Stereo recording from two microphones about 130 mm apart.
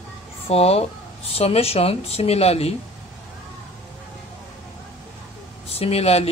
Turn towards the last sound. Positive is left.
turn(degrees=50)  # may be behind; listen again after turning